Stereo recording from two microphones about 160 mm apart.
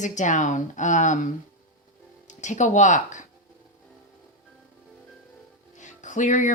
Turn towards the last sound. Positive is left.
turn(degrees=50)  # may be behind; listen again after turning